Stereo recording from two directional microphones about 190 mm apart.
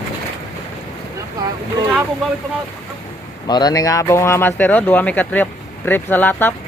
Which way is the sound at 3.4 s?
20° left (ahead or behind).